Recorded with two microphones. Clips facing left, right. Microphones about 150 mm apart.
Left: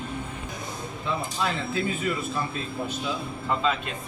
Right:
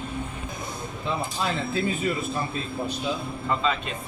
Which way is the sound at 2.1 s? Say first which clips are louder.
Right 1 dB; 35° right (ahead or behind).